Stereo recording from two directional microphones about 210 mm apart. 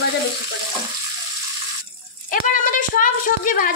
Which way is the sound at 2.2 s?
40° left (ahead or behind).